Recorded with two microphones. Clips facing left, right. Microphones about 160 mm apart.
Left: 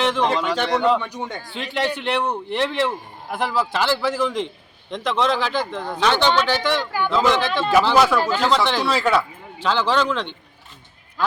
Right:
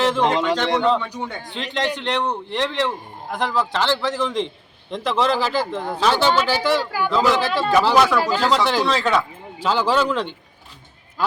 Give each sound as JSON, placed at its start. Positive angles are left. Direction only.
{"t": 0.0, "sound": "speech", "side_deg": -5}
{"t": 0.3, "sound": "speech", "side_deg": -20}
{"t": 0.5, "sound": "a man's voice", "side_deg": 10}
{"t": 9.6, "sound": "a man's voice", "side_deg": -10}